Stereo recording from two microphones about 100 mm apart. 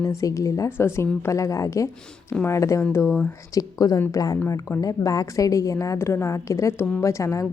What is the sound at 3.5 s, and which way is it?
A woman's voice, 40° left (ahead or behind).